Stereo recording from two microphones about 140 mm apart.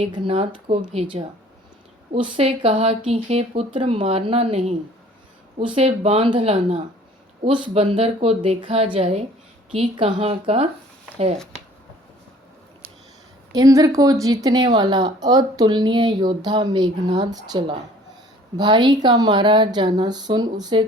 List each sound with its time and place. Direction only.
0.1 s a woman's voice: 40° right (ahead or behind)
7.4 s a woman's voice: 35° right (ahead or behind)
13.5 s a woman's voice: 25° right (ahead or behind)